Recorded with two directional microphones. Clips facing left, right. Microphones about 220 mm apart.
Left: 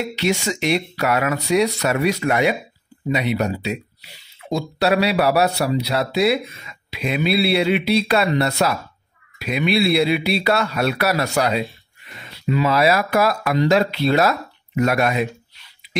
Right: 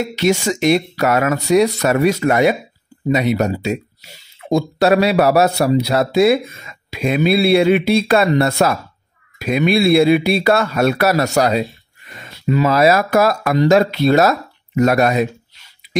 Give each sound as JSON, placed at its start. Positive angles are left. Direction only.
{"t": 0.1, "sound": "speech", "side_deg": -45}